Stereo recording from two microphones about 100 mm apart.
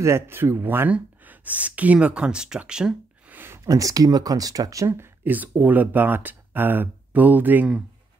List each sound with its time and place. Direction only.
0.0 s speech: 25° right (ahead or behind); by 3.3 s 5° right (ahead or behind)
3.3 s a sound: 25° right (ahead or behind)
3.6 s speech: 35° right (ahead or behind); by 7.8 s 15° right (ahead or behind)